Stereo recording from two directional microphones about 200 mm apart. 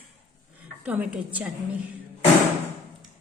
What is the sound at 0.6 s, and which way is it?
Speech, 5° right (ahead or behind).